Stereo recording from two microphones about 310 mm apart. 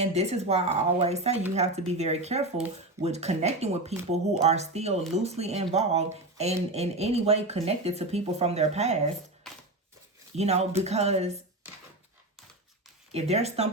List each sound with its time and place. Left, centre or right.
0.0 s speech: centre
9.5 s a sound: centre
10.3 s speech: right
13.1 s speech: centre